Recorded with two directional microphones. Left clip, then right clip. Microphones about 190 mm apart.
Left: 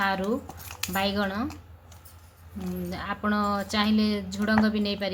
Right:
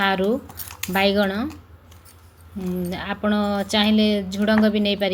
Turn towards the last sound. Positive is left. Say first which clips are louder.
# right 6 dB
turn(degrees=-15)  # may be behind; listen again after turning